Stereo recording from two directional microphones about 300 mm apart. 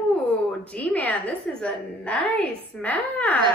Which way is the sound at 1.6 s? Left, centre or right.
Centre.